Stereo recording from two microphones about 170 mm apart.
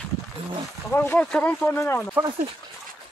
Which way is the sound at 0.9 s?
10° left (ahead or behind).